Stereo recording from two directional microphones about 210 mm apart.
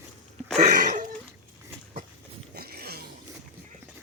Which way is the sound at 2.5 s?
45° right (ahead or behind).